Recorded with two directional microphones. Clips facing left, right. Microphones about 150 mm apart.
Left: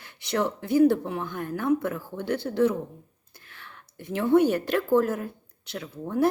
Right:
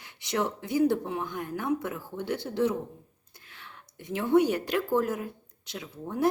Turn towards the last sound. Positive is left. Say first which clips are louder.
# left 5 dB
turn(degrees=-15)  # may be behind; listen again after turning